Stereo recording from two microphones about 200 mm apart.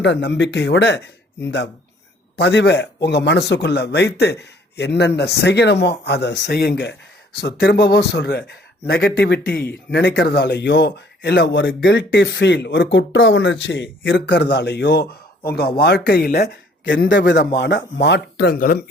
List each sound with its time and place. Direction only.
0.0 s a man's voice: 60° left (ahead or behind)